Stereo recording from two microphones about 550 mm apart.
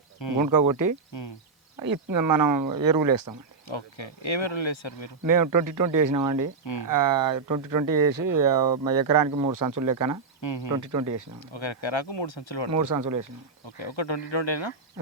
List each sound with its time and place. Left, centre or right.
0.4 s speech: right
3.7 s insect: left
5.2 s speech: right
10.4 s speech: left
10.8 s speech: right
11.3 s speech: left
12.7 s speech: right
13.7 s speech: left